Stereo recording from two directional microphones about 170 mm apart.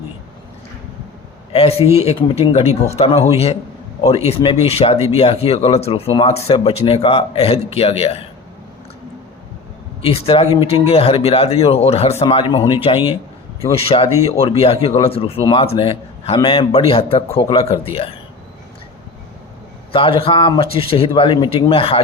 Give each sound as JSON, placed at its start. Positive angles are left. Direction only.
{"t": 1.5, "sound": "speech", "side_deg": 35}
{"t": 10.1, "sound": "speech", "side_deg": 35}
{"t": 19.9, "sound": "speech", "side_deg": 30}